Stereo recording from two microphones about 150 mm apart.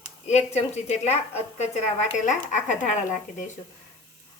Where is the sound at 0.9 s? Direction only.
45° left (ahead or behind).